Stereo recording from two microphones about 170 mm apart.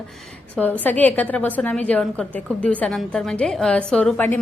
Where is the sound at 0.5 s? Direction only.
10° left (ahead or behind).